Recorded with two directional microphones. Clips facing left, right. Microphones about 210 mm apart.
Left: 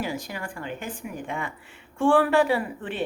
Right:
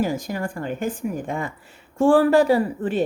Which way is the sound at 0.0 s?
45° right (ahead or behind).